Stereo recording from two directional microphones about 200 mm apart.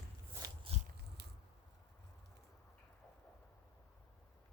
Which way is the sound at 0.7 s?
30° right (ahead or behind).